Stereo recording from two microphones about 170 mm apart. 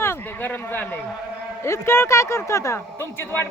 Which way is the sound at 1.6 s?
15° left (ahead or behind).